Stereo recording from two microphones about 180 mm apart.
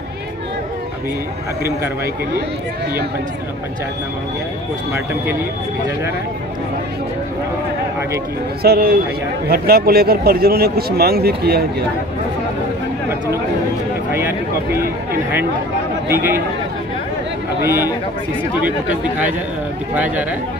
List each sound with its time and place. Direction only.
4.9 s speech: 15° right (ahead or behind)
8.6 s a man's voice: 55° right (ahead or behind)
14.1 s speech: 15° right (ahead or behind)
16.1 s speech: 15° right (ahead or behind)
17.6 s speech: 15° right (ahead or behind)